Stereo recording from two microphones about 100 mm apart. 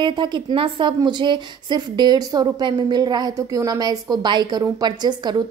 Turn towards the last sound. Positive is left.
turn(degrees=-45)  # may be behind; listen again after turning